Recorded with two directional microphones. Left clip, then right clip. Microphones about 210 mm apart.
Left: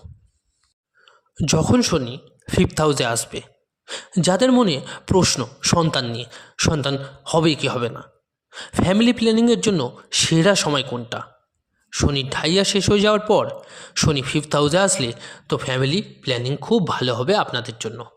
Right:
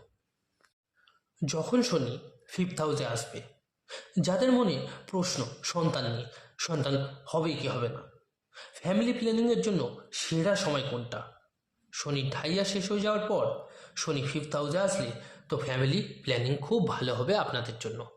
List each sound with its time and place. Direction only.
1.0 s a man's voice: 40° left (ahead or behind)